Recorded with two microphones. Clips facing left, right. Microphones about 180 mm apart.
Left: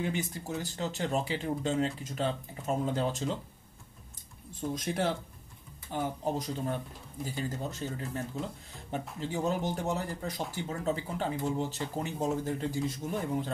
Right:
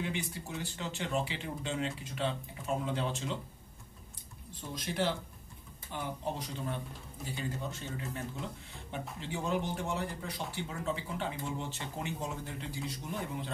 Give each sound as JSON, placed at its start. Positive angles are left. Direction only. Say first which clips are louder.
{"t": 0.1, "sound": "speech", "louder": "left 4 dB", "side_deg": 40}
{"t": 4.6, "sound": "speech", "louder": "left 3 dB", "side_deg": 50}
{"t": 9.2, "sound": "speech", "louder": "left 3 dB", "side_deg": 40}